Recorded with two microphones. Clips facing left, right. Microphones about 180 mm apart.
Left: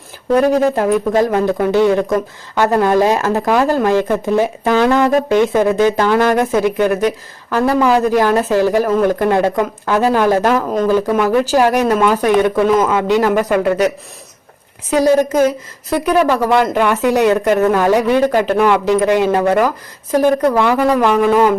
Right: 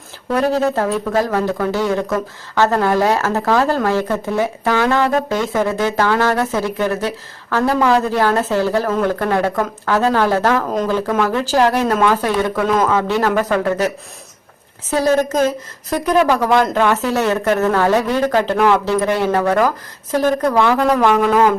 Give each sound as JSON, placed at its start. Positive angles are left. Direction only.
{"t": 0.6, "sound": "speech", "side_deg": 15}